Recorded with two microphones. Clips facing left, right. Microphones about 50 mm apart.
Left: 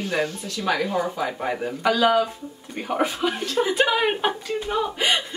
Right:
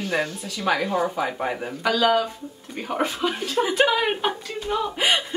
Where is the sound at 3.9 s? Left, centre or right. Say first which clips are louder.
Left 1 dB; centre.